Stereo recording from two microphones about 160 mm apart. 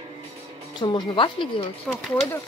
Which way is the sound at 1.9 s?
5° left (ahead or behind).